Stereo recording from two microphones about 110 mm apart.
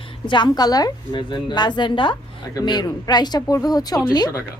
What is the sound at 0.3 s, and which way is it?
A woman's voice, 45° left (ahead or behind).